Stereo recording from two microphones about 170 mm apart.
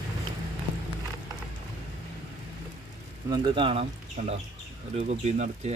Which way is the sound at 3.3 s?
30° right (ahead or behind).